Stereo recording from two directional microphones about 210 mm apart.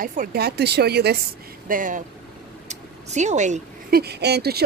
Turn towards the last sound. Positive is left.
turn(degrees=-50)  # may be behind; listen again after turning